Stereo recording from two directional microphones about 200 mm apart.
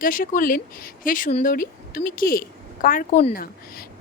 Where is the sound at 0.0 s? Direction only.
45° left (ahead or behind).